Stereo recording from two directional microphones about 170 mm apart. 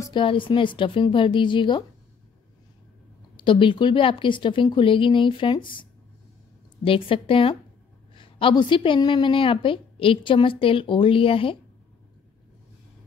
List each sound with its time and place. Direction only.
0.0 s a woman's voice: 30° left (ahead or behind)
3.3 s a woman's voice: 30° left (ahead or behind)